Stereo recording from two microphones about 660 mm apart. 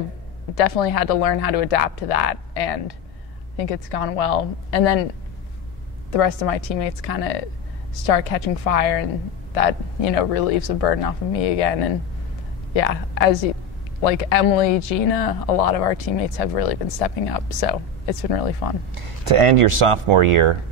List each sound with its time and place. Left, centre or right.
0.6 s speech: left
6.1 s speech: left
18.9 s speech: right